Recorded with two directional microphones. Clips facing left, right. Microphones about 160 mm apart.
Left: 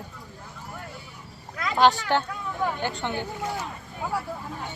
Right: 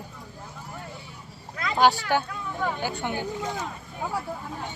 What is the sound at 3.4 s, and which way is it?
Speech, 20° right (ahead or behind).